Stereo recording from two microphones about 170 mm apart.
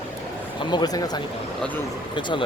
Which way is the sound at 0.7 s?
25° left (ahead or behind).